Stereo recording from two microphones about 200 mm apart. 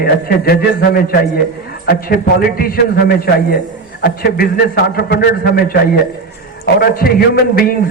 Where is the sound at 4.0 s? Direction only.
50° left (ahead or behind).